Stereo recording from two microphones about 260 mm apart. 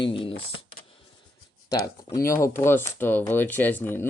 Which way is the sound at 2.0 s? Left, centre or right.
Centre.